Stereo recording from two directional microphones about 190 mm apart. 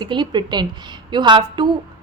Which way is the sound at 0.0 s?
25° right (ahead or behind).